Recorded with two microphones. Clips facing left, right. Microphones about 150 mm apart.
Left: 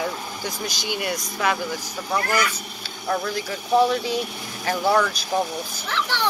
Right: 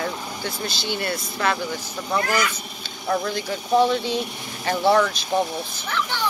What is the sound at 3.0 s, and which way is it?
Speech, centre (ahead or behind).